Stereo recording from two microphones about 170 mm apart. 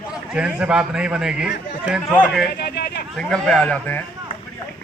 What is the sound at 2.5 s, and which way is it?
Speech, 70° left (ahead or behind).